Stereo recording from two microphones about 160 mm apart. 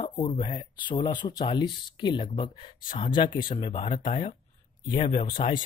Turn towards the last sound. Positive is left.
turn(degrees=30)  # may be behind; listen again after turning